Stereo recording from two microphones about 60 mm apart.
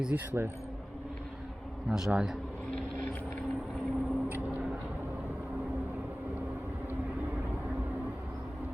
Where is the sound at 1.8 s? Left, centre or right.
Centre.